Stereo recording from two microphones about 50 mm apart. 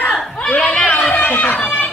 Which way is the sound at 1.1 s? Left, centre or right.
Left.